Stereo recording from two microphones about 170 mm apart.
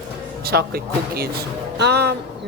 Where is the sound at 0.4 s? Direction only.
65° right (ahead or behind).